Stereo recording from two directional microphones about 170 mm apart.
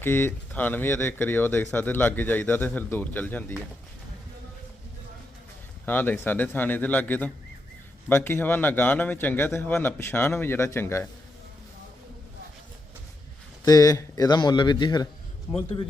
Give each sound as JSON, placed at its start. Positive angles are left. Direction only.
{"t": 0.0, "sound": "speech", "side_deg": 15}
{"t": 5.8, "sound": "speech", "side_deg": 10}
{"t": 13.7, "sound": "speech", "side_deg": 20}